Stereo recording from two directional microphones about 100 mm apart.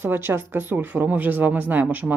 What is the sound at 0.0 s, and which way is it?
Speech, 20° right (ahead or behind).